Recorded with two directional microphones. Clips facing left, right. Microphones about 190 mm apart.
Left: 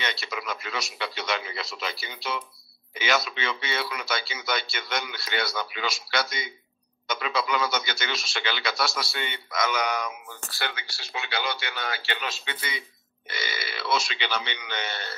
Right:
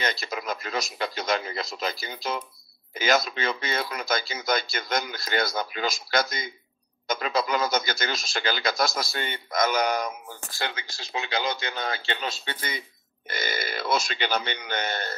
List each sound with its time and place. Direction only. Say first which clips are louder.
0.0 s speech: right 3 dB; 45° right (ahead or behind)
11.7 s speech: right 2 dB; 25° right (ahead or behind)
12.4 s speech: right 2 dB; 45° right (ahead or behind)